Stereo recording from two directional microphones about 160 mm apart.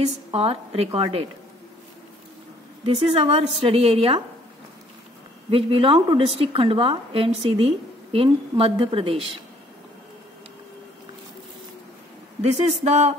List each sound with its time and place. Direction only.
0.0 s a woman's voice: 35° right (ahead or behind)
2.8 s a woman's voice: 40° right (ahead or behind)
5.5 s a woman's voice: 35° right (ahead or behind)
12.4 s speech: 40° right (ahead or behind)